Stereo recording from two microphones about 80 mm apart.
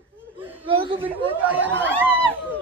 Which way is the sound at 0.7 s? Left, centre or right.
Right.